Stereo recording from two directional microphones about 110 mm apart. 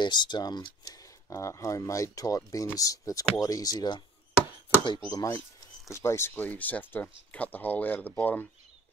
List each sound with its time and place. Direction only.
0.0 s speech: 40° left (ahead or behind)
5.1 s speech: 30° left (ahead or behind); by 8.5 s 15° left (ahead or behind)